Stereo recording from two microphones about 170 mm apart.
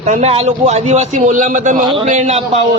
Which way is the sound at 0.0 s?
40° right (ahead or behind).